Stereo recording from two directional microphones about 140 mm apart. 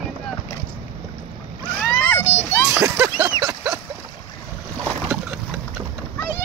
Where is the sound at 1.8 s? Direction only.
15° left (ahead or behind).